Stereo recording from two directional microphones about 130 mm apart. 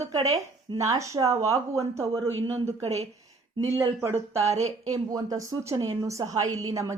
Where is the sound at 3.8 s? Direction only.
20° right (ahead or behind).